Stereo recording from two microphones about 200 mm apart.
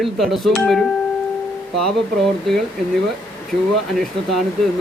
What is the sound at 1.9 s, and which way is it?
Speech, centre (ahead or behind).